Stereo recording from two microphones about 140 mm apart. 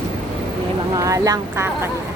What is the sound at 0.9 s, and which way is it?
Speech, 25° right (ahead or behind).